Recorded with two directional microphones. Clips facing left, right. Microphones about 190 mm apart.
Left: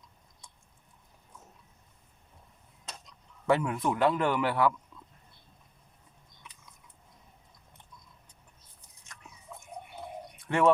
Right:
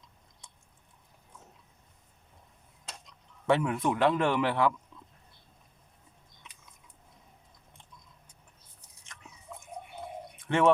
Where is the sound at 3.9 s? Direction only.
25° right (ahead or behind).